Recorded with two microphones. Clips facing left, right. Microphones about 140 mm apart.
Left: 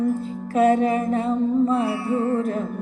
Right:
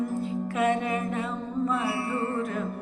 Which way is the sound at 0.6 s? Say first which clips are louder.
Left 9 dB; 40° left (ahead or behind).